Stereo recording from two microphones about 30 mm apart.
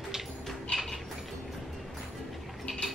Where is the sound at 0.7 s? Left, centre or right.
Left.